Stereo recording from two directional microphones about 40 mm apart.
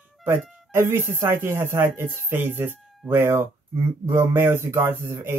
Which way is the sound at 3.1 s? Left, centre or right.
Right.